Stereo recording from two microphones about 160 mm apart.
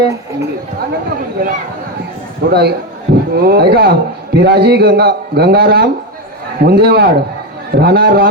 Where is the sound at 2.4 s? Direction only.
90° right.